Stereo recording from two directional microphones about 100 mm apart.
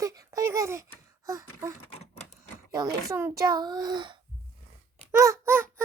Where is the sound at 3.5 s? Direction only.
40° right (ahead or behind).